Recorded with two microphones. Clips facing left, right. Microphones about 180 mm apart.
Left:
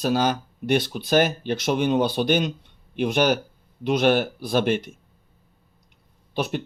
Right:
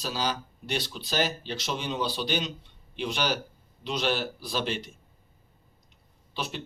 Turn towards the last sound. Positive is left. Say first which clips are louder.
# left 9 dB
turn(degrees=55)  # may be behind; listen again after turning